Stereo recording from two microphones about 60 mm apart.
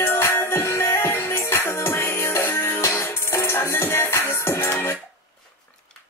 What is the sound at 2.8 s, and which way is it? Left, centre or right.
Music, left.